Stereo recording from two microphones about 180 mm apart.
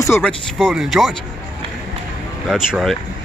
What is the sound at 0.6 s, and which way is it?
Speech, centre (ahead or behind).